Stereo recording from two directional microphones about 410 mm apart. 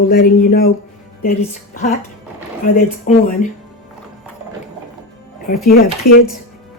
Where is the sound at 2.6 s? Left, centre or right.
Centre.